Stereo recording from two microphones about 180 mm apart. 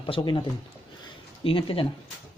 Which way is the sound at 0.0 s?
30° left (ahead or behind).